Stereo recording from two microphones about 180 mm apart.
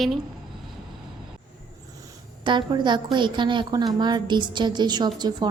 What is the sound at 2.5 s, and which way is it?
A woman's voice, 25° right (ahead or behind).